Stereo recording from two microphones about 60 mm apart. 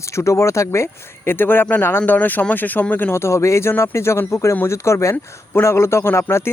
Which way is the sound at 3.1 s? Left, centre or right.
Left.